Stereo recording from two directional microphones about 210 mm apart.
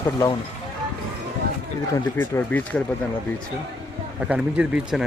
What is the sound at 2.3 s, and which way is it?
Speech, 5° left (ahead or behind).